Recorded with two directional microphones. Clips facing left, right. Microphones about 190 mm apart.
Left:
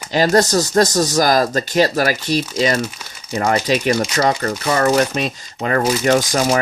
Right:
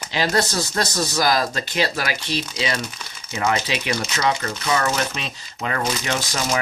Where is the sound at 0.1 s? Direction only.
45° left (ahead or behind).